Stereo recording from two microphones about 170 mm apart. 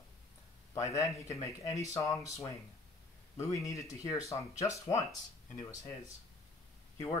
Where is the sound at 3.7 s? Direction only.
20° left (ahead or behind).